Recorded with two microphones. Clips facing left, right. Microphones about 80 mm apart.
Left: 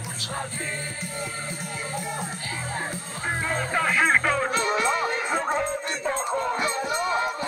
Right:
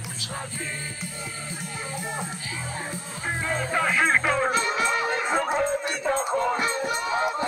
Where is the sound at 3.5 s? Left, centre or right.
Centre.